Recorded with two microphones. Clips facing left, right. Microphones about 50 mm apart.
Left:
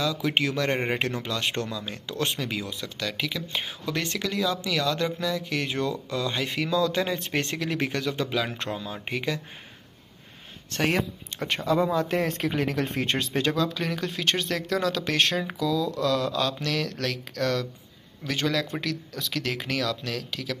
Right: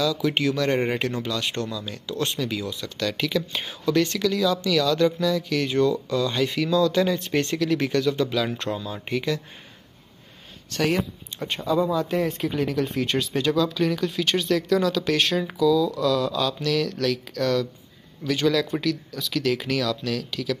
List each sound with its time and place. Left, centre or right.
0.0 s speech: left
0.7 s speech: left
1.3 s speech: left
3.0 s speech: centre
3.8 s speech: left
10.7 s speech: left
11.0 s speech: left
11.4 s speech: left